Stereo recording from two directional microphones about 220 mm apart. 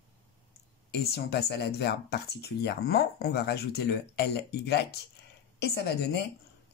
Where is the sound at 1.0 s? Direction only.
45° left (ahead or behind).